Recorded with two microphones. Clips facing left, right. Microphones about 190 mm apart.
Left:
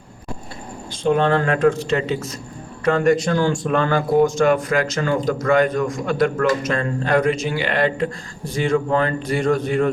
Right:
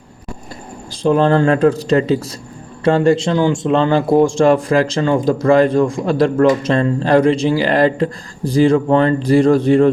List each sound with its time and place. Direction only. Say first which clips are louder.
1.0 s a man's voice: right 5 dB; 35° right (ahead or behind)